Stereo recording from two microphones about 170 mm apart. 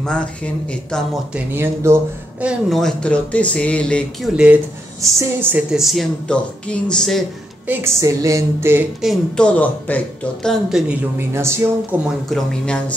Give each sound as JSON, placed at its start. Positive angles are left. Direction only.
{"t": 0.0, "sound": "speech", "side_deg": 5}
{"t": 1.3, "sound": "music", "side_deg": -10}
{"t": 2.4, "sound": "speech", "side_deg": 0}
{"t": 5.0, "sound": "speech", "side_deg": -15}
{"t": 7.6, "sound": "music", "side_deg": -15}
{"t": 9.0, "sound": "speech", "side_deg": 5}
{"t": 11.1, "sound": "music", "side_deg": -15}
{"t": 12.3, "sound": "speech", "side_deg": 5}